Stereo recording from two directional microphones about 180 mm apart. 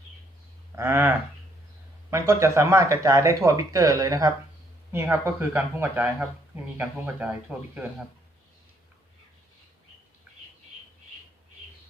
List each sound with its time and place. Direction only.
0.8 s speech: 10° right (ahead or behind)